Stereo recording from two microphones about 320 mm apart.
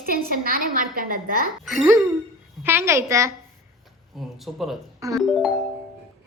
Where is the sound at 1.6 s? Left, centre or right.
Centre.